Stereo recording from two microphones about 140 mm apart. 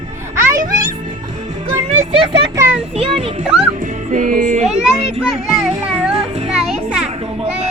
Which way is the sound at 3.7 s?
70° right (ahead or behind).